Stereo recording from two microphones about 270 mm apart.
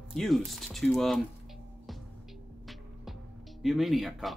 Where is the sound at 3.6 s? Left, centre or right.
Centre.